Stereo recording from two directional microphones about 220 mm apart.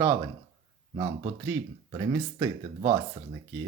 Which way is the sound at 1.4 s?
15° right (ahead or behind).